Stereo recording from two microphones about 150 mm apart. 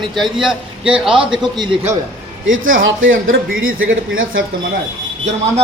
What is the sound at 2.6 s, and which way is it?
Speech, 70° right (ahead or behind).